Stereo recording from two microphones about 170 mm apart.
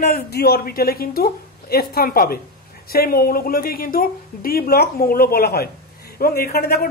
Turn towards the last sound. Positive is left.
turn(degrees=65)  # may be behind; listen again after turning